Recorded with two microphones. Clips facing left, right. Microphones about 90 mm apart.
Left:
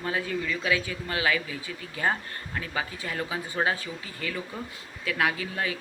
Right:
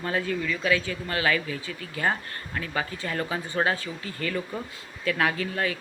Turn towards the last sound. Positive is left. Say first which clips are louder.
# right 3 dB
turn(degrees=15)  # may be behind; listen again after turning